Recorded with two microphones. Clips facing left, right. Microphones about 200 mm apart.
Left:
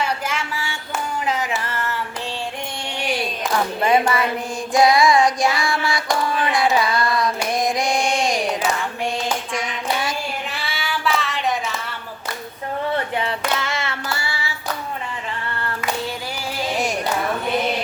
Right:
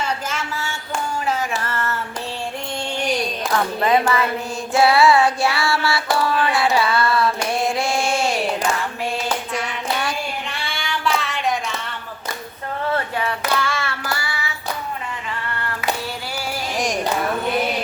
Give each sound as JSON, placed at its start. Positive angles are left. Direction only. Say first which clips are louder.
{"t": 0.3, "sound": "a sound", "louder": "even", "side_deg": 15}
{"t": 1.2, "sound": "music", "louder": "even", "side_deg": 15}
{"t": 3.9, "sound": "music", "louder": "even", "side_deg": 15}
{"t": 4.7, "sound": "child singing", "louder": "even", "side_deg": 15}
{"t": 6.7, "sound": "a sound", "louder": "right 1 dB", "side_deg": 15}
{"t": 7.3, "sound": "carnatic music", "louder": "even", "side_deg": 15}
{"t": 9.6, "sound": "child singing", "louder": "even", "side_deg": 10}
{"t": 13.1, "sound": "child singing", "louder": "right 1 dB", "side_deg": 20}